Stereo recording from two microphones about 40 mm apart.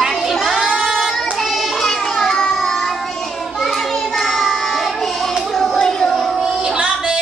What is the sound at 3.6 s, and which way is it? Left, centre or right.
Child singing, centre.